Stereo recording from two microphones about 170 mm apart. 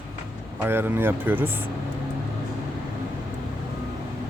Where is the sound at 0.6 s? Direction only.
15° right (ahead or behind).